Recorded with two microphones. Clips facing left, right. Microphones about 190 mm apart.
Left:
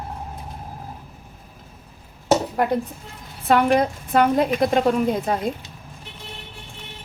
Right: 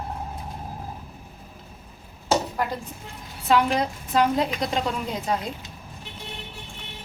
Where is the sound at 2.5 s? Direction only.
55° left (ahead or behind).